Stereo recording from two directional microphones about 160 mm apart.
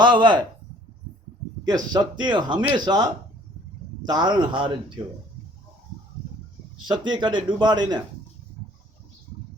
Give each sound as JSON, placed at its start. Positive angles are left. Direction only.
{"t": 0.0, "sound": "speech", "side_deg": -30}
{"t": 1.6, "sound": "speech", "side_deg": -25}
{"t": 6.8, "sound": "speech", "side_deg": -25}